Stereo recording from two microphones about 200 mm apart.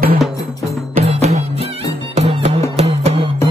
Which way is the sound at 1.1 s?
30° right (ahead or behind).